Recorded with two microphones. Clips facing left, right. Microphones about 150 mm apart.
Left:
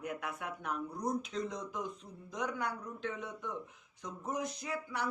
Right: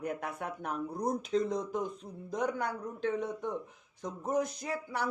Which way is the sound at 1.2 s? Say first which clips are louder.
Right 8 dB; 35° right (ahead or behind).